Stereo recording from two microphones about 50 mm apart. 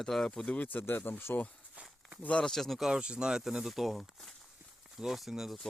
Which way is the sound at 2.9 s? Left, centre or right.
Centre.